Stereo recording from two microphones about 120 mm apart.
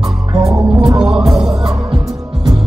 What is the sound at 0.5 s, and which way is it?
Music, 30° right (ahead or behind).